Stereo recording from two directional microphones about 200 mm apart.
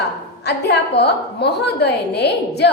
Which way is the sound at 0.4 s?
55° left (ahead or behind).